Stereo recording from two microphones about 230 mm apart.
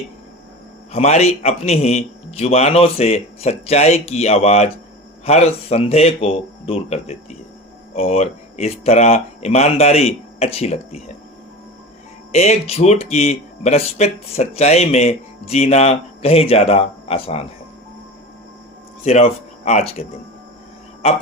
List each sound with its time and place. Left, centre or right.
0.9 s speech: left
12.3 s speech: left
19.0 s speech: left